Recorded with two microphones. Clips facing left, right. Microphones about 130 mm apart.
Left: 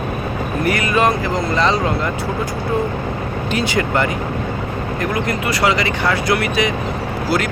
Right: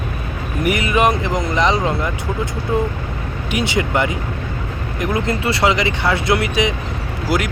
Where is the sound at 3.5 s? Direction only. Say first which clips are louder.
Even; 20° right (ahead or behind).